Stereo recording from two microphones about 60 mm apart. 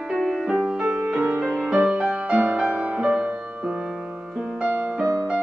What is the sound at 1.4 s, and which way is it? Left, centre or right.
Music, centre.